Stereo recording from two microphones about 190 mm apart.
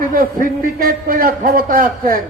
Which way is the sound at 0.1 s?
45° right (ahead or behind).